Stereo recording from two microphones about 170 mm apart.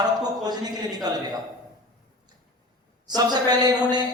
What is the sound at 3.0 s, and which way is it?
A man's voice, 25° right (ahead or behind).